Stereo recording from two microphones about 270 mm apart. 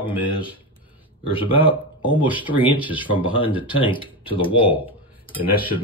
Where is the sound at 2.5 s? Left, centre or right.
Centre.